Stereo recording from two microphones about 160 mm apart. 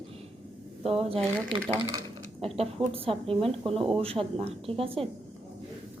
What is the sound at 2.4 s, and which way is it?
Speech, 35° right (ahead or behind).